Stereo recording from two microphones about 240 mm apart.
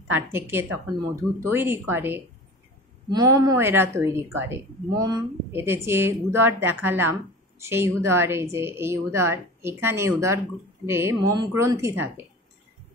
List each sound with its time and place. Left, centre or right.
0.1 s a woman's voice: centre